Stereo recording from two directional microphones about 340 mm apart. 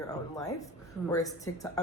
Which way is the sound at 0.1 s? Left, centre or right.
Centre.